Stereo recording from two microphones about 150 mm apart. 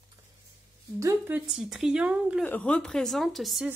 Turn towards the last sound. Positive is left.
turn(degrees=0)  # may be behind; listen again after turning